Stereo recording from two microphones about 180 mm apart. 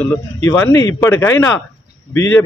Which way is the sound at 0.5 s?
15° left (ahead or behind).